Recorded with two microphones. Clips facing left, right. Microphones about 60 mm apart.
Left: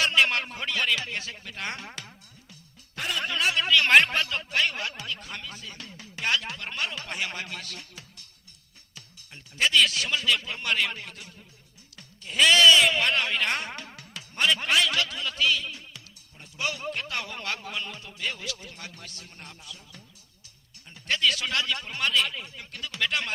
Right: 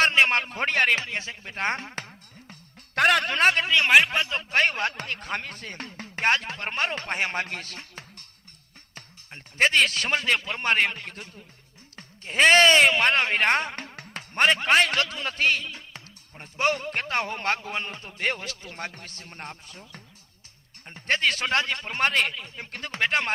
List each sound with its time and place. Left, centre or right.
0.0 s a man's voice: right
1.1 s speech: right
2.9 s speech: right
3.3 s speech: right
3.8 s a man's voice: centre
4.1 s a man's voice: right
4.5 s speech: right